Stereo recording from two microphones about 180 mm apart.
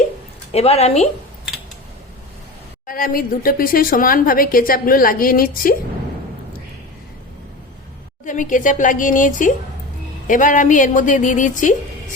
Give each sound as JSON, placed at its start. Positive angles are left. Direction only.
{"t": 0.5, "sound": "a woman's voice", "side_deg": 35}
{"t": 2.8, "sound": "speech", "side_deg": 50}
{"t": 8.2, "sound": "speech", "side_deg": 45}